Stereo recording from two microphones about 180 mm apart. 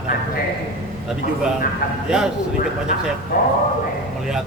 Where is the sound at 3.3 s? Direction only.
50° left (ahead or behind).